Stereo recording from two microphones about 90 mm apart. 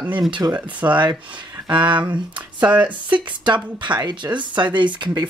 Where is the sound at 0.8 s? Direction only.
60° right (ahead or behind).